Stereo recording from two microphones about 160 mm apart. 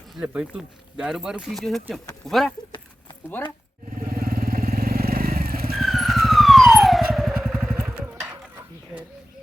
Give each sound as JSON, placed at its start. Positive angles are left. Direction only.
{"t": 0.2, "sound": "speech", "side_deg": -5}
{"t": 3.9, "sound": "vehicle", "side_deg": -65}
{"t": 5.7, "sound": "police car", "side_deg": 0}